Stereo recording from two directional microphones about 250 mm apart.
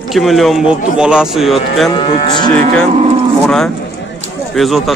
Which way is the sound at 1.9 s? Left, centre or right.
Centre.